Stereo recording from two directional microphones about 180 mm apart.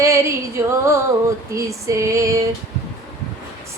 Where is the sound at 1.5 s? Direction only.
15° right (ahead or behind).